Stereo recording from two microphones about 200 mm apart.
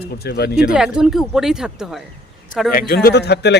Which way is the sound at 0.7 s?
5° right (ahead or behind).